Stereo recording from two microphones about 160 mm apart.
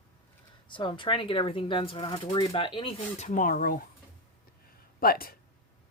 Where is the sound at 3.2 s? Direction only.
55° left (ahead or behind).